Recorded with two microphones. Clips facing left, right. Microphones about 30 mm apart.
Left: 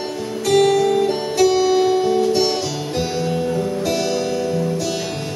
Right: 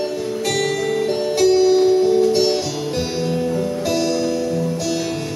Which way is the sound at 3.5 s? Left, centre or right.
Centre.